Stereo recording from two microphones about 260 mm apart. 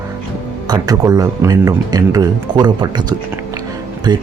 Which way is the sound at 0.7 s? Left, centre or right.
Centre.